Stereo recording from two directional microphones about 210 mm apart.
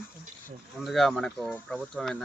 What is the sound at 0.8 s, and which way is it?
Speech, centre (ahead or behind).